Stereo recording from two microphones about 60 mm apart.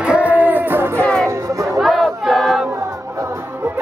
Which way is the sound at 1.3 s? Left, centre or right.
Right.